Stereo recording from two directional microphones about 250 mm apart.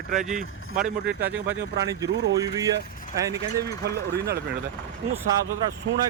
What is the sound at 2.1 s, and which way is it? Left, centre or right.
Speech, right.